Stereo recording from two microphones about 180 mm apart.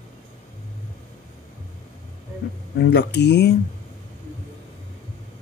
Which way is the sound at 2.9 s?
70° left (ahead or behind).